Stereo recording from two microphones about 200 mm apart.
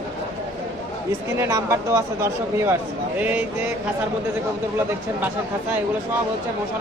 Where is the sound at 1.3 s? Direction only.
15° right (ahead or behind).